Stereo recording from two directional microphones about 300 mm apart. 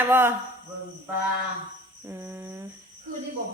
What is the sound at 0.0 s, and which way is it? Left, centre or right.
Speech, centre.